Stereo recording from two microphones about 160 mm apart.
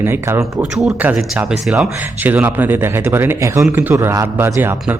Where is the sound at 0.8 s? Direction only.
5° right (ahead or behind).